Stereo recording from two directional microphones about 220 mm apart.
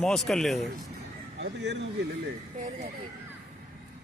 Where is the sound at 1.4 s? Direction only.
50° right (ahead or behind).